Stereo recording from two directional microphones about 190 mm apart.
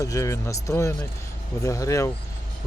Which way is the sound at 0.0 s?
15° left (ahead or behind).